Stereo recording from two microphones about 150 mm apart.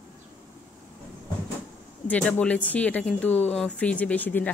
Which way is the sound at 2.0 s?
10° left (ahead or behind).